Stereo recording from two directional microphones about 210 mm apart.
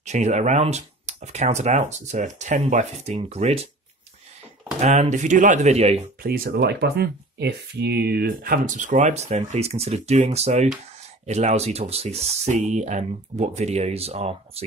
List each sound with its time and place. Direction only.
0.0 s speech: 35° right (ahead or behind)
4.7 s speech: 30° right (ahead or behind)
6.2 s speech: 45° right (ahead or behind); by 14.6 s 30° right (ahead or behind)